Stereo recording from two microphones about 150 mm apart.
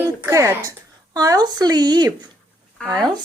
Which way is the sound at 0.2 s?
20° right (ahead or behind).